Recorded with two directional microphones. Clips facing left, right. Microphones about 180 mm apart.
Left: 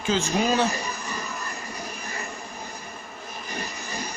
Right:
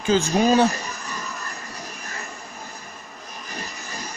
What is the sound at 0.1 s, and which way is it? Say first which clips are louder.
Speech: right 8 dB; 40° right (ahead or behind).